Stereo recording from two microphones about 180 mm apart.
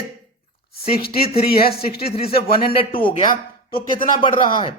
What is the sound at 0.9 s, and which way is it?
Speech, 55° left (ahead or behind).